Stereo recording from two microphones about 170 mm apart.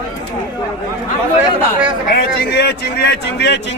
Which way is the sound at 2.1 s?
70° left (ahead or behind).